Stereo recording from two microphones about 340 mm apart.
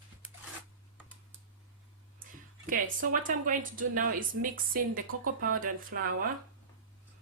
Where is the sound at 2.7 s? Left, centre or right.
Right.